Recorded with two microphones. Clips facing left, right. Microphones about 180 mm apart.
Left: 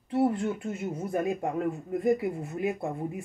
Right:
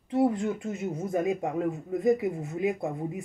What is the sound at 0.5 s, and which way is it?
Speech, 20° right (ahead or behind).